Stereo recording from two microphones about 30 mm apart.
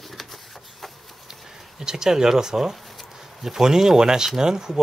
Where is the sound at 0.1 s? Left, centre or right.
Centre.